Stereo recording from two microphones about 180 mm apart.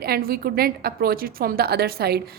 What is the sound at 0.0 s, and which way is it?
A woman's voice, 55° right (ahead or behind).